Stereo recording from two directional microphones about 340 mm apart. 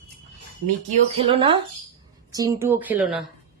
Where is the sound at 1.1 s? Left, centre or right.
Centre.